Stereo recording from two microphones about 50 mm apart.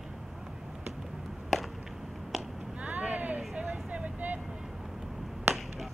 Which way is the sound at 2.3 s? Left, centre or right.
Centre.